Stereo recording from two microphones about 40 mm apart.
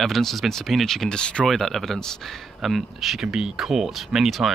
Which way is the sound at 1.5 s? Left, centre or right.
Centre.